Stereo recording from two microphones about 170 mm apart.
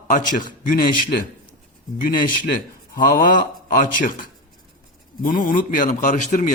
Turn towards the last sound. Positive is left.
turn(degrees=45)  # may be behind; listen again after turning